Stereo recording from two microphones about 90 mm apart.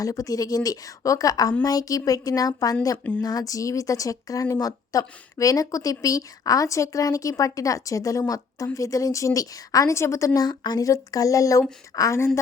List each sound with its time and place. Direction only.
0.0 s speech: 40° left (ahead or behind)